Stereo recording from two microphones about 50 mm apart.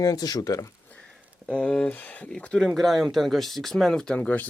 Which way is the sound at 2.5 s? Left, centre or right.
Centre.